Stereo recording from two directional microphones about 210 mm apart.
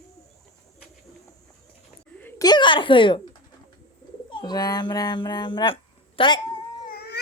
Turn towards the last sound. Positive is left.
turn(degrees=50)  # may be behind; listen again after turning